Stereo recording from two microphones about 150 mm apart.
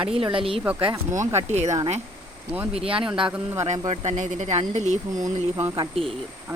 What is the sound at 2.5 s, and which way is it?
Speech, 10° right (ahead or behind).